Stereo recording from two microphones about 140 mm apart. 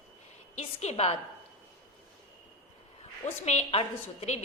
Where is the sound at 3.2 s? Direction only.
50° left (ahead or behind).